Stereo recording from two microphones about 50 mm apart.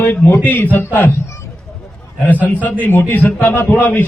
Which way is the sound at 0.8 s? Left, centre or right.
Left.